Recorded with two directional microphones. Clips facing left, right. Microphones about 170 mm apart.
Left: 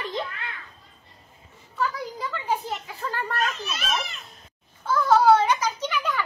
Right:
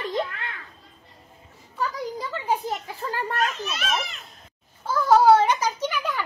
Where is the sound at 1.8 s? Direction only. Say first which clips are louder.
Even; 35° right (ahead or behind).